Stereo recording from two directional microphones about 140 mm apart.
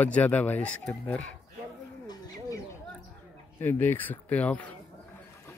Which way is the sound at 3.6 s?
15° left (ahead or behind).